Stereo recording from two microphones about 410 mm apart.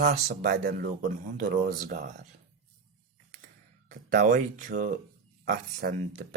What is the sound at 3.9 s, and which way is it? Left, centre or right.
Speech, centre.